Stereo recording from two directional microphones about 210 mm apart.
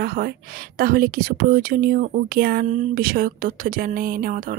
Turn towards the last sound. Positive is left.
turn(degrees=-40)  # may be behind; listen again after turning